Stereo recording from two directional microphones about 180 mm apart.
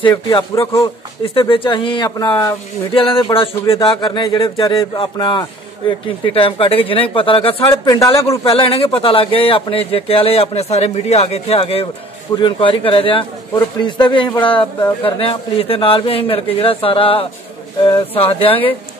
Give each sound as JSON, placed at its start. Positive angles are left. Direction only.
{"t": 0.0, "sound": "speech", "side_deg": 25}
{"t": 8.5, "sound": "speech", "side_deg": 30}